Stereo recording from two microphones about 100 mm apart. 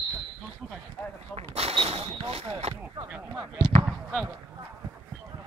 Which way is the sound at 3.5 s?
70° right (ahead or behind).